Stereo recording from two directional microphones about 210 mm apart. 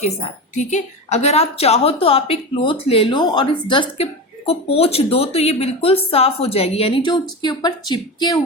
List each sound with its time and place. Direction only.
0.5 s a woman's voice: 35° left (ahead or behind); by 8.4 s 20° left (ahead or behind)